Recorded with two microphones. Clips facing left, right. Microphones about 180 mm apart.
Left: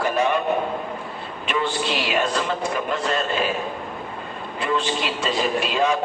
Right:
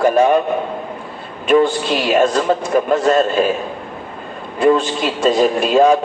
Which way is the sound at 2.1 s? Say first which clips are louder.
Right 12 dB; 45° right (ahead or behind).